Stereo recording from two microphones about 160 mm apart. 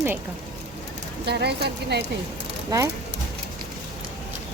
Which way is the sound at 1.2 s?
90° right.